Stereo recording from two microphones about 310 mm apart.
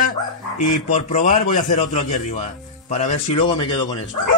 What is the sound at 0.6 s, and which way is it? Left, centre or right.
Speech, left.